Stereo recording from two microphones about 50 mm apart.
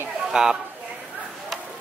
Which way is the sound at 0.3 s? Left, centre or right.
Centre.